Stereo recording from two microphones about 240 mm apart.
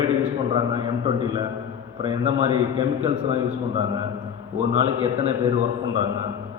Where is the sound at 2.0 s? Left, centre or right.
Right.